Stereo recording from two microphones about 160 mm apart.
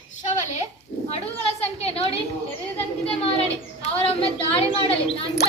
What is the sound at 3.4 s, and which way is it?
A woman's voice, 40° left (ahead or behind).